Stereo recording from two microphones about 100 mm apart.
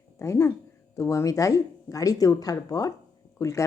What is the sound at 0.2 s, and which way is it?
Speech, 30° left (ahead or behind).